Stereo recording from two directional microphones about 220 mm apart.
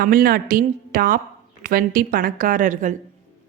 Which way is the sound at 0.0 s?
40° right (ahead or behind).